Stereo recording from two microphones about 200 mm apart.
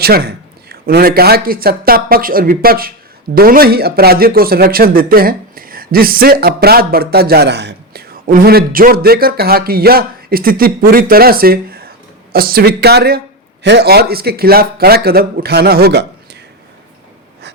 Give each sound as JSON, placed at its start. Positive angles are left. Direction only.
{"t": 0.0, "sound": "speech", "side_deg": -50}